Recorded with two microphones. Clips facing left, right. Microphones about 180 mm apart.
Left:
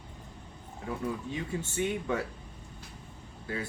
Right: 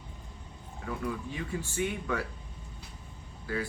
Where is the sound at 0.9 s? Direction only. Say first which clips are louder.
Left 1 dB; 25° left (ahead or behind).